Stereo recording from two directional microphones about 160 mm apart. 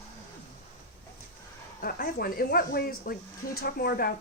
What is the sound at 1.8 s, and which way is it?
Speech, 65° left (ahead or behind).